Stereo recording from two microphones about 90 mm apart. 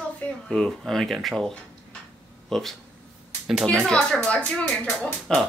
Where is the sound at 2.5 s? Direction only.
5° left (ahead or behind).